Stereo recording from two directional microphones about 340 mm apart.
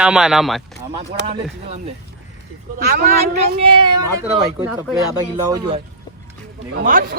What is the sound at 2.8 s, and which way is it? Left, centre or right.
Speech, right.